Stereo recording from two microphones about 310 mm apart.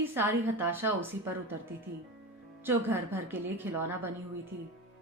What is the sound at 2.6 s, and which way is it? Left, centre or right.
A woman's voice, centre.